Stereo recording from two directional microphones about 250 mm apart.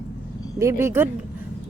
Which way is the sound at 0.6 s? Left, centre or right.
Centre.